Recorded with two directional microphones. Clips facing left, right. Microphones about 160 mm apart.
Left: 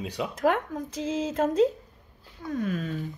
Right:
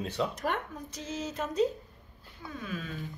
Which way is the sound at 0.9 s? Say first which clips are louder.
Left 8 dB; 90° left.